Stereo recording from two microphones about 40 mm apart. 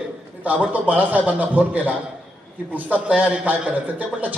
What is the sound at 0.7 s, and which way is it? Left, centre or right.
A man's voice, right.